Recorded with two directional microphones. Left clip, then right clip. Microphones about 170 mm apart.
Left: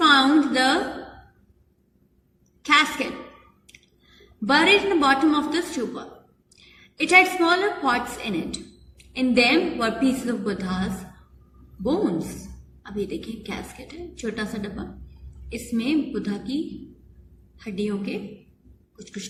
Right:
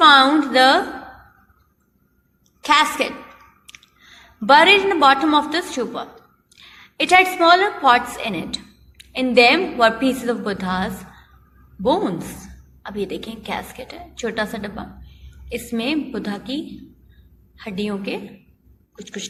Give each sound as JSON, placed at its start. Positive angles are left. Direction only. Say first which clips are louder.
{"t": 0.0, "sound": "a sound", "louder": "right 5 dB", "side_deg": -35}
{"t": 4.4, "sound": "a woman's voice", "louder": "right 6 dB", "side_deg": -35}
{"t": 17.6, "sound": "a woman's voice", "louder": "right 2 dB", "side_deg": -35}